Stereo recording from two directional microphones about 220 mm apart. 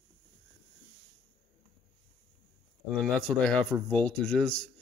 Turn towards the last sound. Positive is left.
turn(degrees=5)  # may be behind; listen again after turning